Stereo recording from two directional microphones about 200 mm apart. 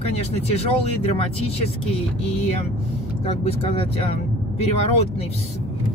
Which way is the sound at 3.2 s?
30° left (ahead or behind).